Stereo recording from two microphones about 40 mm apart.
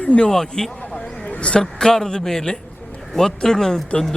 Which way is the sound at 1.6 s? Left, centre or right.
Centre.